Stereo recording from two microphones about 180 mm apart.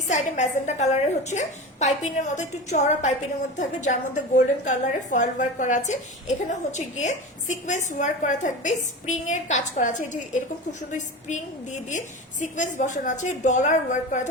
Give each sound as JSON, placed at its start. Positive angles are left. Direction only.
{"t": 0.1, "sound": "a woman's voice", "side_deg": 40}